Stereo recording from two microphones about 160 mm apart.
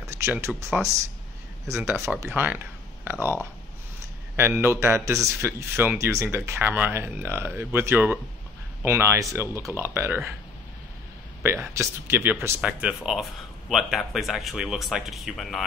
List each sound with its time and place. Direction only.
0.0 s a sound: 20° right (ahead or behind)
1.7 s speech: 15° right (ahead or behind)
4.4 s speech: 15° right (ahead or behind)
11.7 s speech: 15° right (ahead or behind); by 15.6 s centre (ahead or behind)